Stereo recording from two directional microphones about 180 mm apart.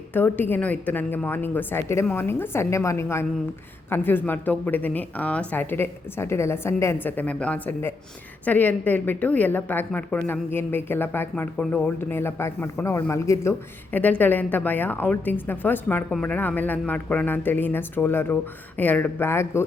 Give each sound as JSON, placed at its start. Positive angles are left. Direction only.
{"t": 0.1, "sound": "a woman's voice", "side_deg": 10}